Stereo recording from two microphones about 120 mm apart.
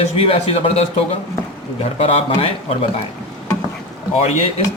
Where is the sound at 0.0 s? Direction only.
55° left (ahead or behind).